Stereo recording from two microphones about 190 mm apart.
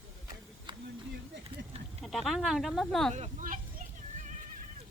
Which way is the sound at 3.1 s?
40° right (ahead or behind).